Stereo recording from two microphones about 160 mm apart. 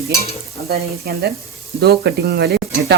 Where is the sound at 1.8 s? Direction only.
90° right.